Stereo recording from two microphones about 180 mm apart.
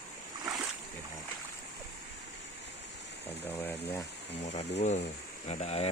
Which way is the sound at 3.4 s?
10° left (ahead or behind).